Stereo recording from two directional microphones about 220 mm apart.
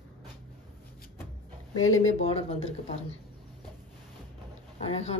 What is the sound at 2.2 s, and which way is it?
Speech, 25° left (ahead or behind).